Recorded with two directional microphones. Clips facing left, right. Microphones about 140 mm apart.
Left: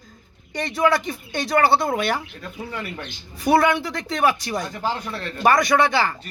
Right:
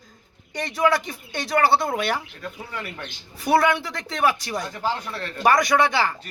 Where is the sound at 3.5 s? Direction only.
5° right (ahead or behind).